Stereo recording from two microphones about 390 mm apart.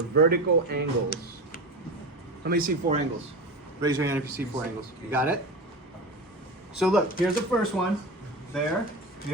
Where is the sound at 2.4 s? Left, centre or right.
Right.